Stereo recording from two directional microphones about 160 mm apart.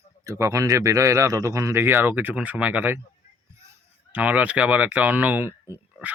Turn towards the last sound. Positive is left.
turn(degrees=-15)  # may be behind; listen again after turning